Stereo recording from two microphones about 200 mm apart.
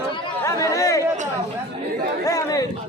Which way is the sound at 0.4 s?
15° left (ahead or behind).